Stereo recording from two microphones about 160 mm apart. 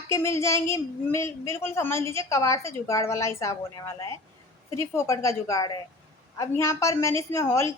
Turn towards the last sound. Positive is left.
turn(degrees=15)  # may be behind; listen again after turning